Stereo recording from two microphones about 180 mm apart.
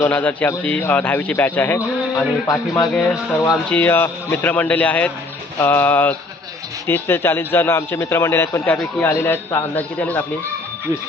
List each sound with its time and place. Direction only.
0.0 s a man's voice: 10° left (ahead or behind)